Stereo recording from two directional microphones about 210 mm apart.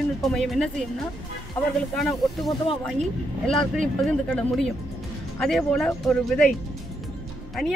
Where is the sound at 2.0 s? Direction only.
Centre (ahead or behind).